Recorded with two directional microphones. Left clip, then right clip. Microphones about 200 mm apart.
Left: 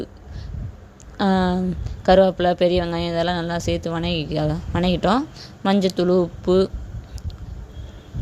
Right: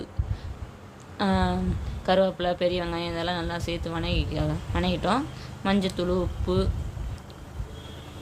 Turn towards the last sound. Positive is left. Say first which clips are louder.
# left 9 dB
turn(degrees=35)  # may be behind; listen again after turning